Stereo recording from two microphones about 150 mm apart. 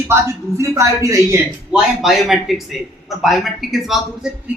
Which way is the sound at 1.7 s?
Centre (ahead or behind).